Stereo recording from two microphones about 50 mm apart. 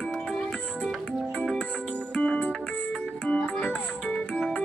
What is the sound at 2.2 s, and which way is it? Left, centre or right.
Music, left.